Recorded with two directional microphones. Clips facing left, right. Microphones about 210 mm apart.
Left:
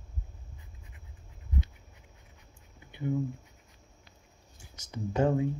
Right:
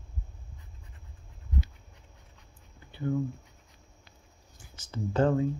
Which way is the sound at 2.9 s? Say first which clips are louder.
Right 1 dB; 15° left (ahead or behind).